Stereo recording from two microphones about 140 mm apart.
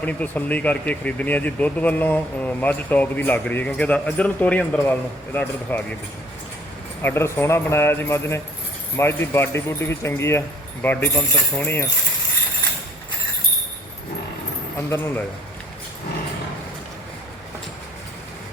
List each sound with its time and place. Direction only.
0.0 s speech: 10° left (ahead or behind)
7.0 s speech: 15° left (ahead or behind)
10.8 s speech: 10° left (ahead or behind)
14.8 s speech: 15° left (ahead or behind)